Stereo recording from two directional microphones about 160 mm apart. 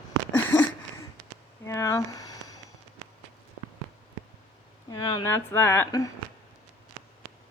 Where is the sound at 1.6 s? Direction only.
20° left (ahead or behind).